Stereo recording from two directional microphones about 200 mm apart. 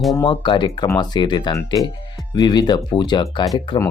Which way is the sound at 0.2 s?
25° left (ahead or behind).